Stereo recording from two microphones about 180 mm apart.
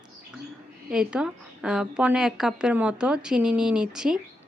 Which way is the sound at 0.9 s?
5° right (ahead or behind).